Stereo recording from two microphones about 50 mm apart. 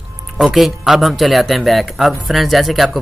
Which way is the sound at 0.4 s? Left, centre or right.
Centre.